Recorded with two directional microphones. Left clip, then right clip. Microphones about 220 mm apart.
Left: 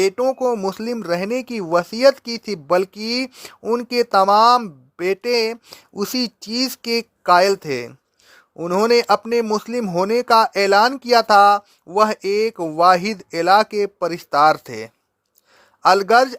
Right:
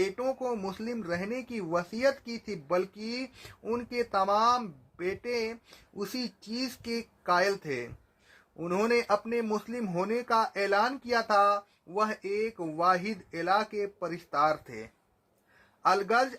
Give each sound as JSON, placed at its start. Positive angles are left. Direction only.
{"t": 0.0, "sound": "speech", "side_deg": 45}